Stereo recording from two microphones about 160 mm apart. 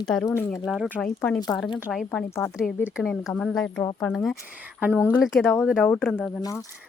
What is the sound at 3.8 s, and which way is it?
Speech, 20° left (ahead or behind).